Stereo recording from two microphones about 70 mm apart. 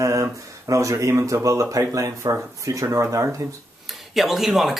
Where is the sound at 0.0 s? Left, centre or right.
Right.